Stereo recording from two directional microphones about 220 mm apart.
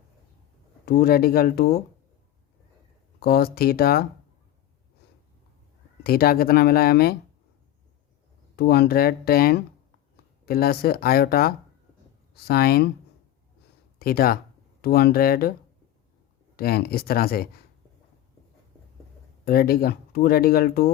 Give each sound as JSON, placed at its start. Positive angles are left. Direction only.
{"t": 0.9, "sound": "speech", "side_deg": 45}
{"t": 3.2, "sound": "speech", "side_deg": 45}
{"t": 6.0, "sound": "speech", "side_deg": 45}
{"t": 8.5, "sound": "speech", "side_deg": 45}
{"t": 14.0, "sound": "speech", "side_deg": 45}
{"t": 16.6, "sound": "speech", "side_deg": 45}
{"t": 19.5, "sound": "speech", "side_deg": 45}